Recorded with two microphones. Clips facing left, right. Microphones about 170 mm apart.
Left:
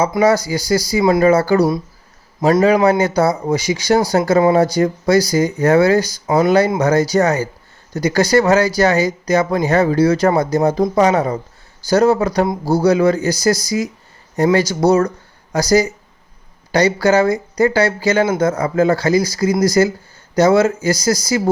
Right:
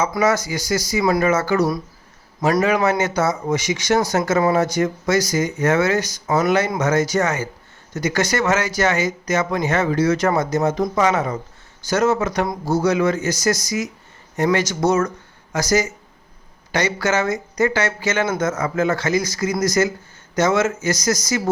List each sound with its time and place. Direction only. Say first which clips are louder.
0.0 s speech: left 5 dB; 30° left (ahead or behind)